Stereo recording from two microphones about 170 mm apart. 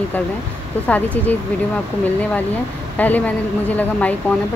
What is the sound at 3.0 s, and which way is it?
Speech, 10° left (ahead or behind).